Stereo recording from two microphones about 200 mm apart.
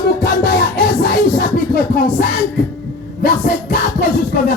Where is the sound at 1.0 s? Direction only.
50° left (ahead or behind).